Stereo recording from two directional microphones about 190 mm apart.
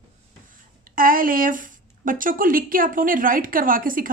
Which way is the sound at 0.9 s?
50° right (ahead or behind).